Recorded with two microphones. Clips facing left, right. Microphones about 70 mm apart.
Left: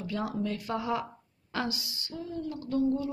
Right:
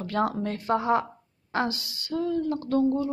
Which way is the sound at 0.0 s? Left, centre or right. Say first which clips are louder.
Right 8 dB; right.